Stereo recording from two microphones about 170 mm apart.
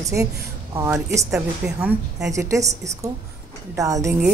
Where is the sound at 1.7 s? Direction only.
5° right (ahead or behind).